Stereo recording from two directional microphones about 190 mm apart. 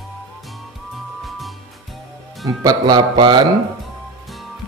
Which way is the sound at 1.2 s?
Centre (ahead or behind).